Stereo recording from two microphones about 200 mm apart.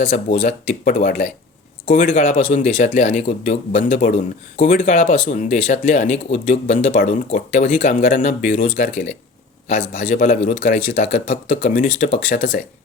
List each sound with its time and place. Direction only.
0.0 s speech: 30° left (ahead or behind)
10.2 s speech: 40° left (ahead or behind)